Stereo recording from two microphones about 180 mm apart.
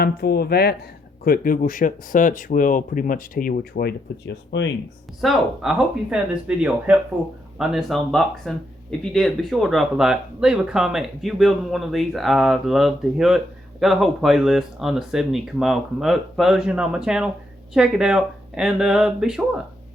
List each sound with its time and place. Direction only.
0.0 s speech: 60° left (ahead or behind)
5.2 s speech: centre (ahead or behind)